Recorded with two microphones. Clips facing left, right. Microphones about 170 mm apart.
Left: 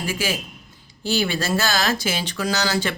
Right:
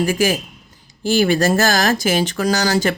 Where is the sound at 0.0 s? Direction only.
45° right (ahead or behind).